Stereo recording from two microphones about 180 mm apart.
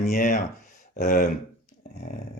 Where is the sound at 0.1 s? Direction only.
45° left (ahead or behind).